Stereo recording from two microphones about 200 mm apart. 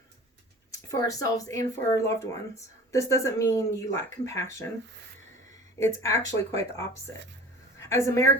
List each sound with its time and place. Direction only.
0.7 s speech: 15° left (ahead or behind)
5.7 s a woman's voice: 15° left (ahead or behind)